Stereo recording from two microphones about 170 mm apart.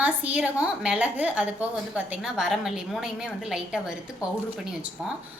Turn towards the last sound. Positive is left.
turn(degrees=-5)  # may be behind; listen again after turning